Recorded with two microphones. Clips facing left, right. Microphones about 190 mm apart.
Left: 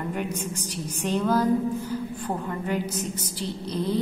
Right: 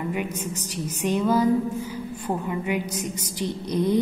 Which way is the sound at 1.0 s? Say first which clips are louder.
Right 2 dB; 10° right (ahead or behind).